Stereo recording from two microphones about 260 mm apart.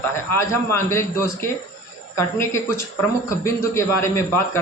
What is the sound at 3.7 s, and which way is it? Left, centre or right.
Speech, centre.